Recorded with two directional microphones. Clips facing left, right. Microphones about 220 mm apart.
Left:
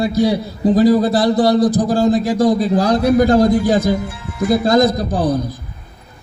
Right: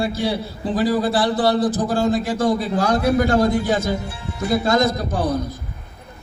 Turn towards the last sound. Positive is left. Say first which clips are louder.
# left 4 dB
turn(degrees=35)  # may be behind; listen again after turning